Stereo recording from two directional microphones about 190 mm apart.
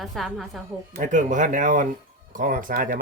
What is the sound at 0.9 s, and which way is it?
Speech, 40° right (ahead or behind).